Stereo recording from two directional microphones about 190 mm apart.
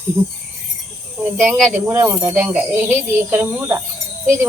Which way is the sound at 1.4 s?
10° right (ahead or behind).